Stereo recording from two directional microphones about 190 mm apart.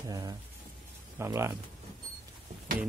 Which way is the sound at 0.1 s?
20° right (ahead or behind).